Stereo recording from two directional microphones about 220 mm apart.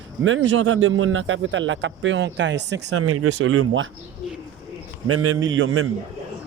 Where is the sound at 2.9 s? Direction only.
90° right; by 3.9 s 65° right (ahead or behind).